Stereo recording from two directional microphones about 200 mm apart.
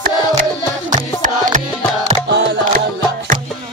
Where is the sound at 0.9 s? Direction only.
40° right (ahead or behind).